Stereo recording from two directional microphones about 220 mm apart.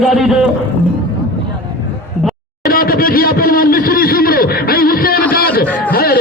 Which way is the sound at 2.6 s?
40° left (ahead or behind).